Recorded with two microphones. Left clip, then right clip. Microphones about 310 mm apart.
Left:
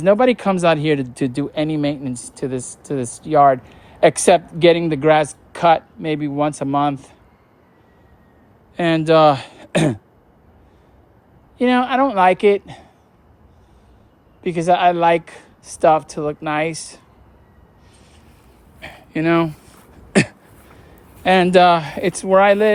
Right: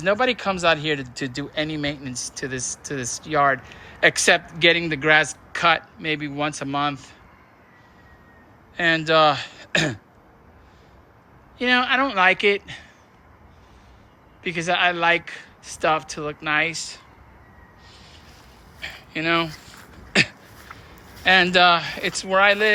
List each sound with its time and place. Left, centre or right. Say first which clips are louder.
0.0 s speech: left 6 dB; left
8.7 s speech: left 4 dB; left
11.5 s speech: left 3 dB; centre
14.4 s speech: left 6 dB; centre
18.8 s a sound: left 4 dB; left
21.2 s speech: left 3 dB; left